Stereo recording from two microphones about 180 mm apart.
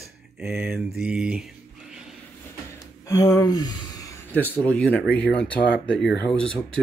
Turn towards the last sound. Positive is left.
turn(degrees=5)  # may be behind; listen again after turning